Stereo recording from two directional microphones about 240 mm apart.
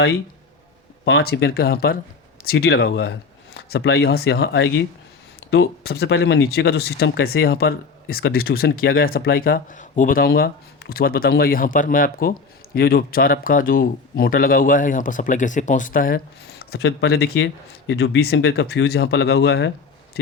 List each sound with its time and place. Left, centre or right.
1.0 s speech: left